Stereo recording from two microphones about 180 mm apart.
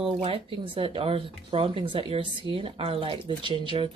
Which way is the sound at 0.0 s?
30° right (ahead or behind).